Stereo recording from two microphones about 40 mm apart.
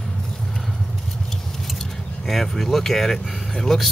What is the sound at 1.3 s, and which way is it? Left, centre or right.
Vehicle, centre.